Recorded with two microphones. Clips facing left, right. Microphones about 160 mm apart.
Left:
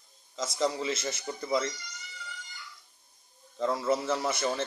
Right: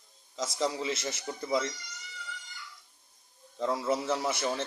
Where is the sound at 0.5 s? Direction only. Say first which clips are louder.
Left 2 dB; 5° right (ahead or behind).